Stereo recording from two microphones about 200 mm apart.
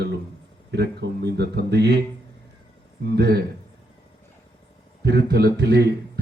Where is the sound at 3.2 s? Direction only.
55° right (ahead or behind).